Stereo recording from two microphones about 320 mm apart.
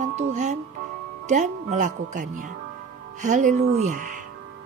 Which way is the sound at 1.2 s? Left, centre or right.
Right.